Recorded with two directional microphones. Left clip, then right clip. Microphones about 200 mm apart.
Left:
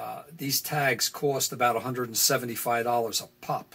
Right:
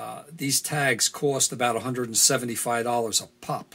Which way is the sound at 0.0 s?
30° right (ahead or behind).